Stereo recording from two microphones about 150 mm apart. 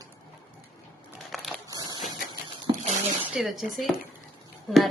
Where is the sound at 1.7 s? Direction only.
25° right (ahead or behind).